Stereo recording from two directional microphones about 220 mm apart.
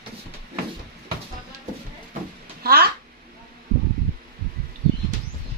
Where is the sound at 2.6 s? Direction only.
45° right (ahead or behind).